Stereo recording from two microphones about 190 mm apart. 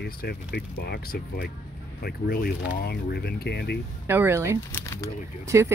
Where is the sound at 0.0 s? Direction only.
60° left (ahead or behind).